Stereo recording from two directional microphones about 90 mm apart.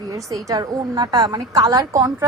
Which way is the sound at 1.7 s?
40° right (ahead or behind).